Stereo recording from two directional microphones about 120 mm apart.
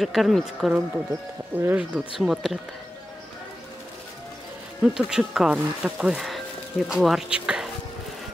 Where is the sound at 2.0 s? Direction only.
5° right (ahead or behind).